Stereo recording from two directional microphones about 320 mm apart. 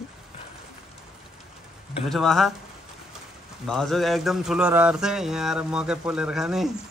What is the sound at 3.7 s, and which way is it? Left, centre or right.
Mantra, centre.